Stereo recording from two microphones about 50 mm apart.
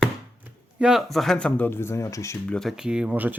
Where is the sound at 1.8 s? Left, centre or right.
Left.